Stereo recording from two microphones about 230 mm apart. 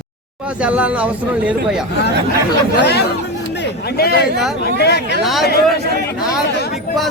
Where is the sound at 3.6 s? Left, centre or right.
Left.